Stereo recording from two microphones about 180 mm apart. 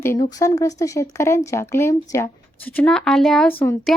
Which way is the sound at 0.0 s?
15° left (ahead or behind).